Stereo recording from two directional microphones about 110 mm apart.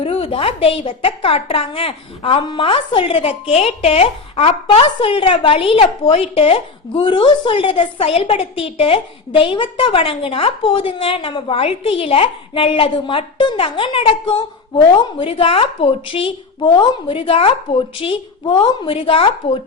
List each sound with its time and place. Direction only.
0.0 s a woman's voice: 55° left (ahead or behind)